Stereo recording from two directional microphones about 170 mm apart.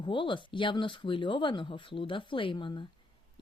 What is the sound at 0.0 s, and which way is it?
Speech, 30° left (ahead or behind).